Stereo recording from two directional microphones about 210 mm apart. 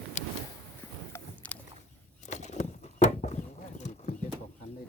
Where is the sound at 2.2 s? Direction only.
35° left (ahead or behind).